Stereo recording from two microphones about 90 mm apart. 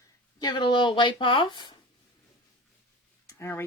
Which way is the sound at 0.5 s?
60° left (ahead or behind).